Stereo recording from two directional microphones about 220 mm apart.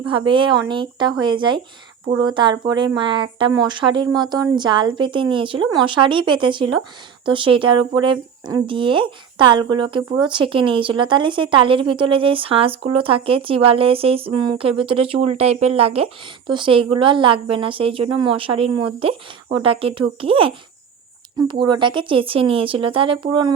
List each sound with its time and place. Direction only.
0.1 s speech: 20° right (ahead or behind)